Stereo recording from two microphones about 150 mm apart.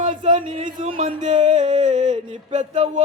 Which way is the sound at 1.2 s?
55° right (ahead or behind).